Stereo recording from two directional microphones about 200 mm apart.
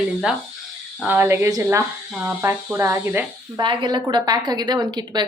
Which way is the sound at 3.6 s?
25° right (ahead or behind).